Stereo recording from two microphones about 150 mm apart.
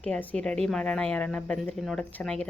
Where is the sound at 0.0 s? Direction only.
10° left (ahead or behind).